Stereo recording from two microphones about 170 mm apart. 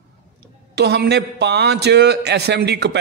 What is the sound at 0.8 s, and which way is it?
A man's voice, 75° right (ahead or behind).